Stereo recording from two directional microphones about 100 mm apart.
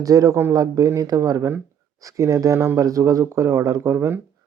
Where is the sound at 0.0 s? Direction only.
35° right (ahead or behind).